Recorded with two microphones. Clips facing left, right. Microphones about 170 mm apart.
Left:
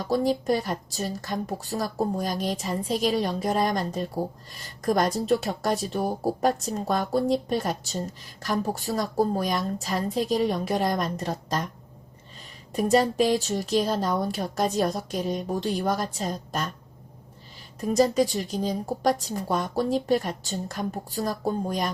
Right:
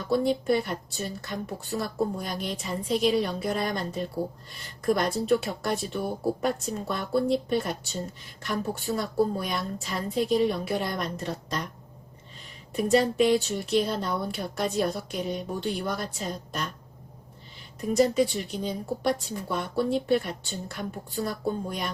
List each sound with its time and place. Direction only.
0.0 s a woman's voice: 40° left (ahead or behind)
12.7 s a woman's voice: 40° left (ahead or behind)
18.1 s a woman's voice: 40° left (ahead or behind)